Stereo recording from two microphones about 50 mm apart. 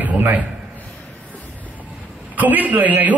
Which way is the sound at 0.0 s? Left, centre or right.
Right.